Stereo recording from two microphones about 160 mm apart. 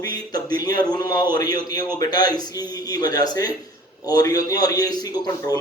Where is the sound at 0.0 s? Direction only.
25° left (ahead or behind).